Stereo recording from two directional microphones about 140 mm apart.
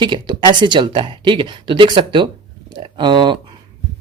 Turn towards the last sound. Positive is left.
turn(degrees=-35)  # may be behind; listen again after turning